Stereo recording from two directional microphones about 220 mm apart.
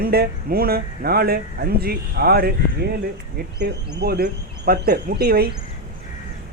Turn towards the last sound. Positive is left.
turn(degrees=-45)  # may be behind; listen again after turning